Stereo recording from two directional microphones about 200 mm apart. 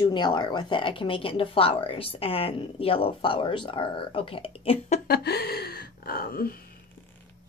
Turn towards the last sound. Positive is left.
turn(degrees=50)  # may be behind; listen again after turning